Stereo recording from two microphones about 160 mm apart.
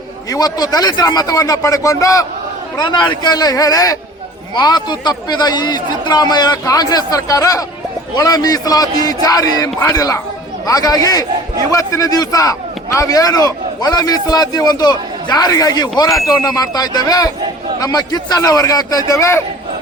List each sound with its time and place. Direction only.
0.3 s speech: 25° left (ahead or behind)